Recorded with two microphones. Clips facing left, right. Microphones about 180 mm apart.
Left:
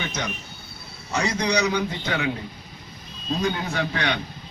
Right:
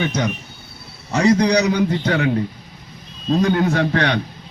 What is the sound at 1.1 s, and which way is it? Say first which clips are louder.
A man's voice: right 9 dB; 35° right (ahead or behind).